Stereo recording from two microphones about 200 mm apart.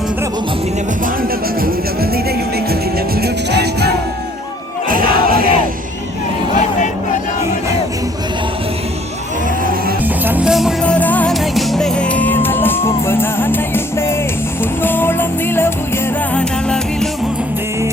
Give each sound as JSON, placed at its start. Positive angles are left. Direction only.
{"t": 1.6, "sound": "music", "side_deg": -50}
{"t": 4.9, "sound": "crowd", "side_deg": -45}
{"t": 10.2, "sound": "music", "side_deg": -5}